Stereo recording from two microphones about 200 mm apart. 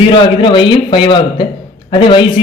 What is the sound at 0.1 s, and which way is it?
A man's voice, 25° left (ahead or behind).